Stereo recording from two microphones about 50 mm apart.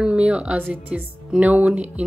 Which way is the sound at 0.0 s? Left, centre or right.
Right.